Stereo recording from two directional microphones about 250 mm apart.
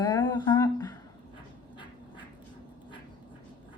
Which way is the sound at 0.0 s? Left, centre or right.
Centre.